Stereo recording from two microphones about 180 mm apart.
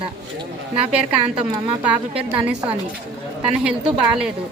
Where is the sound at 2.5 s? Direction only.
5° right (ahead or behind).